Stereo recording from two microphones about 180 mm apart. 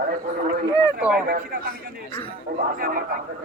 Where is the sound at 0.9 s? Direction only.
5° right (ahead or behind).